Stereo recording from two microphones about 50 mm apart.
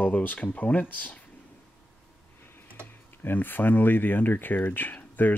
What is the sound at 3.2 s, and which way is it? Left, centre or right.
Speech, left.